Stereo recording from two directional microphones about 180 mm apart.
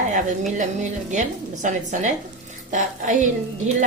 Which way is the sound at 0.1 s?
45° right (ahead or behind).